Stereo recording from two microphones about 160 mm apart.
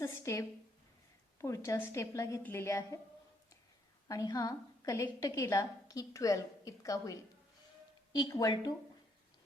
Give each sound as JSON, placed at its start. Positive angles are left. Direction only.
{"t": 0.0, "sound": "a sound", "side_deg": 15}
{"t": 1.4, "sound": "a woman's voice", "side_deg": 20}
{"t": 4.1, "sound": "a woman's voice", "side_deg": 20}